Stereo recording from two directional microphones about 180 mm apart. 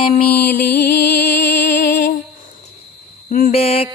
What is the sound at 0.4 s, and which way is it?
Music, 60° left (ahead or behind).